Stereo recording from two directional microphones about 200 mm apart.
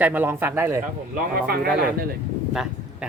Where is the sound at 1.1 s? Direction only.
45° right (ahead or behind).